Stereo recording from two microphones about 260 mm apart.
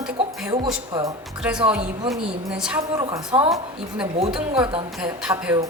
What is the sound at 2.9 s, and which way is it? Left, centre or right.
Speech, centre.